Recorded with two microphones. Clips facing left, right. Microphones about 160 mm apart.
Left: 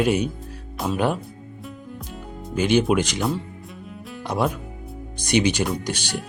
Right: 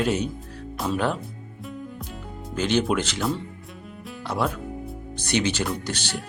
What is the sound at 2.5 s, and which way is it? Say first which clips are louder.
Speech: left 4 dB; 10° left (ahead or behind).